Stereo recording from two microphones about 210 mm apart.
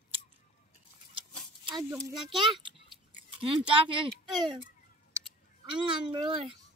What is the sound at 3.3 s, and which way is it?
Speech, 25° right (ahead or behind).